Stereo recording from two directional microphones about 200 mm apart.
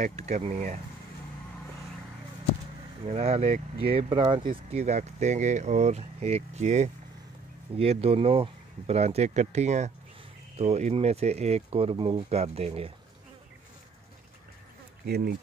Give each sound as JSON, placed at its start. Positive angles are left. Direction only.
{"t": 0.0, "sound": "speech", "side_deg": -35}
{"t": 3.1, "sound": "speech", "side_deg": -30}
{"t": 4.5, "sound": "speech", "side_deg": -35}
{"t": 15.0, "sound": "speech", "side_deg": -50}